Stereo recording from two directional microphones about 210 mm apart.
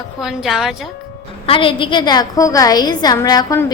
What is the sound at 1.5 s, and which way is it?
A woman's voice, 25° left (ahead or behind).